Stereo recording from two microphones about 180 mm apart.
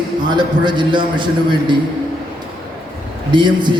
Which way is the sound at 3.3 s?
25° right (ahead or behind).